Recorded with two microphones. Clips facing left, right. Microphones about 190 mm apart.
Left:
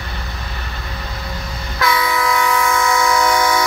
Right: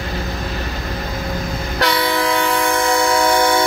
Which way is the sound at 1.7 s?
35° right (ahead or behind).